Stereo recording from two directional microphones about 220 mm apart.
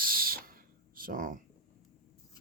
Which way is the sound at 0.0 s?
40° right (ahead or behind).